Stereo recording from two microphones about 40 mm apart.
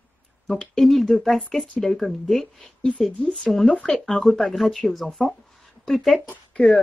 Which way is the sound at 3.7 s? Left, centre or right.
Centre.